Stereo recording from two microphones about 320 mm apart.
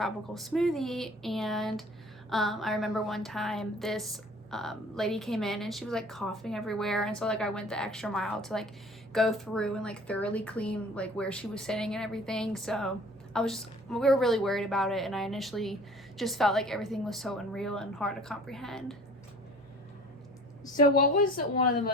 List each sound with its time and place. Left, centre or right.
0.0 s a woman's voice: centre
20.7 s a woman's voice: left